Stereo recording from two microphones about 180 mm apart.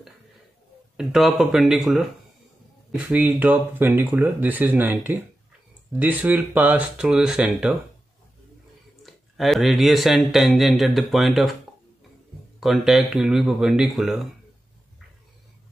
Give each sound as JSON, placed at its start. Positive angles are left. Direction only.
{"t": 0.9, "sound": "speech", "side_deg": 0}
{"t": 3.1, "sound": "speech", "side_deg": -10}
{"t": 9.0, "sound": "speech", "side_deg": 0}
{"t": 12.5, "sound": "speech", "side_deg": 0}